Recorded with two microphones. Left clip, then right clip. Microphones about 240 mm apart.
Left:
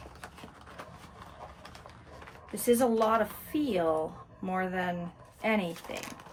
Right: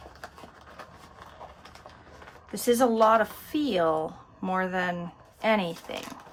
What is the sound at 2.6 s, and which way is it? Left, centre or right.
Speech, right.